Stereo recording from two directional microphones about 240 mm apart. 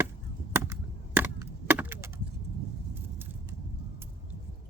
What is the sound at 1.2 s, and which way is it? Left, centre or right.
Wood, centre.